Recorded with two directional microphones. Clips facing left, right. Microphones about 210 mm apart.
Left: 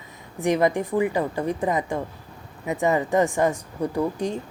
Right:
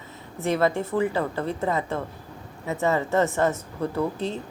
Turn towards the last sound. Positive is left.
turn(degrees=15)  # may be behind; listen again after turning